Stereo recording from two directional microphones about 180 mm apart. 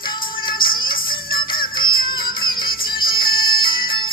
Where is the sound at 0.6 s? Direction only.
50° left (ahead or behind).